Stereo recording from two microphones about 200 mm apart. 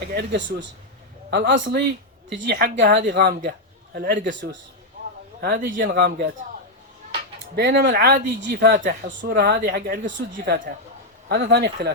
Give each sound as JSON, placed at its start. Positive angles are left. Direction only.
{"t": 0.1, "sound": "a woman's voice", "side_deg": -55}
{"t": 5.4, "sound": "a man's voice", "side_deg": -45}
{"t": 7.5, "sound": "speech", "side_deg": -55}
{"t": 10.0, "sound": "a woman's voice", "side_deg": -65}
{"t": 10.3, "sound": "a woman's voice", "side_deg": -50}